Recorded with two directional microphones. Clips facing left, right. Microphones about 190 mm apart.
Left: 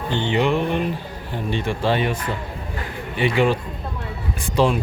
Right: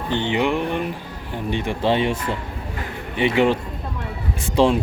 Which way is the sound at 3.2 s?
20° right (ahead or behind).